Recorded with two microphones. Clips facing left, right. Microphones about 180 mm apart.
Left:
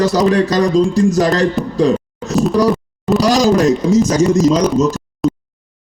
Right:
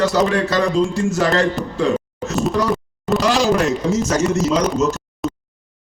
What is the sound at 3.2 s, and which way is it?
Speech, 40° left (ahead or behind).